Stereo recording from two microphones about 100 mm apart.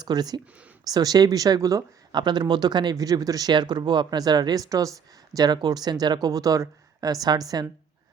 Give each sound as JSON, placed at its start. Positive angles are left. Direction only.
{"t": 0.0, "sound": "speech", "side_deg": -45}